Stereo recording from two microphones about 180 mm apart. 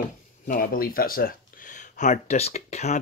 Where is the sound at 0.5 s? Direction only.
55° left (ahead or behind).